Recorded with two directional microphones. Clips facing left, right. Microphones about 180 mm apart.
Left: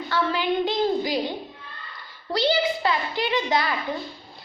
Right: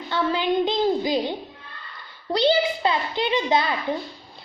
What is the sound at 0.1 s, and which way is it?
A woman's voice, 20° right (ahead or behind).